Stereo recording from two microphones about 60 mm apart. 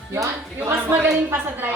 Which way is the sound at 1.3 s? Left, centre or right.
Right.